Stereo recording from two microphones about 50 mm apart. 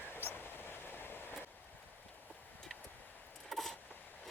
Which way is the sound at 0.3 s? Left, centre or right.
Left.